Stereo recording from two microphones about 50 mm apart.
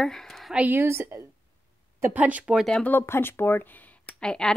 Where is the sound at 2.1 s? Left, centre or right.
Right.